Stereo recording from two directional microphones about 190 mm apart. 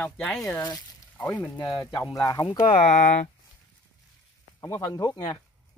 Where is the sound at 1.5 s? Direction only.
20° left (ahead or behind).